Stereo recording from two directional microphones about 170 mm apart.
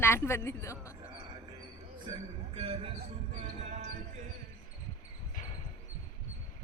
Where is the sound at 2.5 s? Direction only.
35° right (ahead or behind).